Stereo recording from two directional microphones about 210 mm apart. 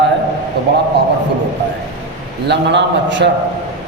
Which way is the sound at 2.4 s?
55° right (ahead or behind).